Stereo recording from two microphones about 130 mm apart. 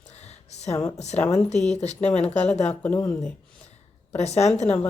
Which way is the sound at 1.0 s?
55° left (ahead or behind).